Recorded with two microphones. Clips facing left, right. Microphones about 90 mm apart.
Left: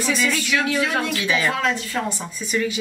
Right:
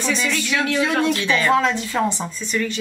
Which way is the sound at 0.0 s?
5° left (ahead or behind).